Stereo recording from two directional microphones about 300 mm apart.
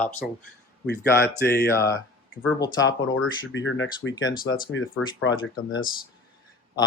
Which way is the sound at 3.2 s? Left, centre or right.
Left.